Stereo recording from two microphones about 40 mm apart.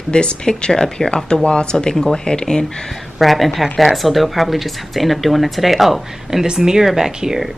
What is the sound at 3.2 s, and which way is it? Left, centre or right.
Speech, centre.